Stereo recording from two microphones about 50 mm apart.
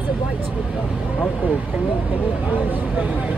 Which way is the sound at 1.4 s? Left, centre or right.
Right.